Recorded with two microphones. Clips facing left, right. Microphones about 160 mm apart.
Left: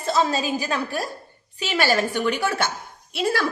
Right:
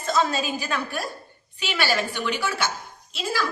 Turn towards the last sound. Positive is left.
turn(degrees=60)  # may be behind; listen again after turning